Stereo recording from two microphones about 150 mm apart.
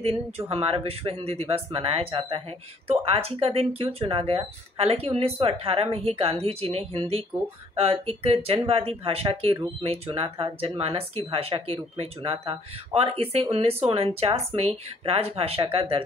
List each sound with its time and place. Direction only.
0.5 s speech: 40° right (ahead or behind)